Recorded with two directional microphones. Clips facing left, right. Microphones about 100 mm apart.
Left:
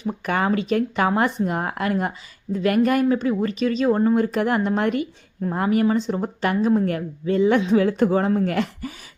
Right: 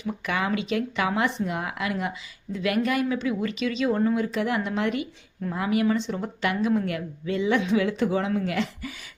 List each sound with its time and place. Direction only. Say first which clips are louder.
0.0 s speech: left 5 dB; 40° left (ahead or behind)